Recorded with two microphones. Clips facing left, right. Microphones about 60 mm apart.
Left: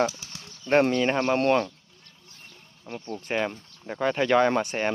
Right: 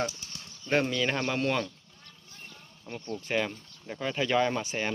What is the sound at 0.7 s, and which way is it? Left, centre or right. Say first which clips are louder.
Speech: left 6 dB; left.